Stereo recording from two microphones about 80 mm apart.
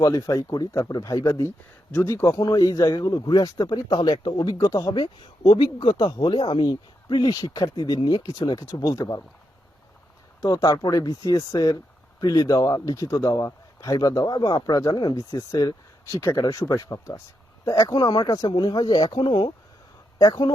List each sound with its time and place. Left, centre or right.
0.0 s speech: left
2.4 s speech: left
4.5 s speech: left
5.5 s speech: left
10.4 s speech: left
14.9 s speech: left
16.2 s speech: left
18.5 s speech: left
20.1 s speech: left